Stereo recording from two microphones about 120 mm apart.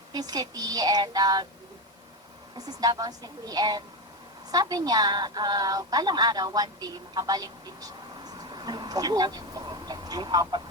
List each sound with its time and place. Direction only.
0.1 s speech: 35° right (ahead or behind)
2.6 s a woman's voice: 35° right (ahead or behind)